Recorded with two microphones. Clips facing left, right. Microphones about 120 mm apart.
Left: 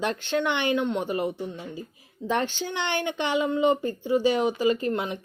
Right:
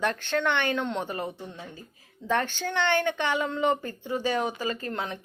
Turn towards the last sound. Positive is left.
turn(degrees=15)  # may be behind; listen again after turning